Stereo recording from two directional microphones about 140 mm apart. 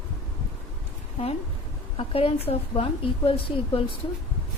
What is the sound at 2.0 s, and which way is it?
A woman's voice, 40° left (ahead or behind).